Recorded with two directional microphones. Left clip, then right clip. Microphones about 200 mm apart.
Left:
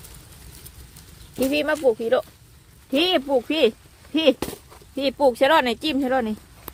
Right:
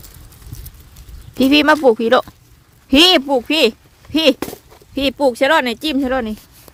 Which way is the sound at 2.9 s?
45° right (ahead or behind).